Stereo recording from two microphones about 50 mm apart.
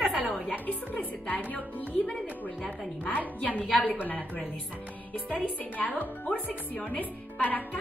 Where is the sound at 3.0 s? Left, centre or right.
Left.